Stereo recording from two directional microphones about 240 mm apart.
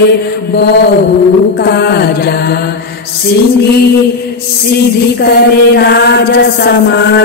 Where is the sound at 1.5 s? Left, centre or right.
Left.